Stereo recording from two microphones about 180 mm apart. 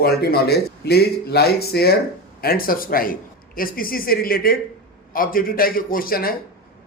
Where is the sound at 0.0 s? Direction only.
60° left (ahead or behind).